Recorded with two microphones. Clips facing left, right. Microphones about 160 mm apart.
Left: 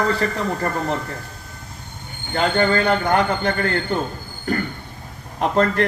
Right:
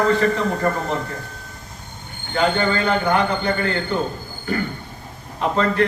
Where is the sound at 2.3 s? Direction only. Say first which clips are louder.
Left 1 dB; 40° left (ahead or behind).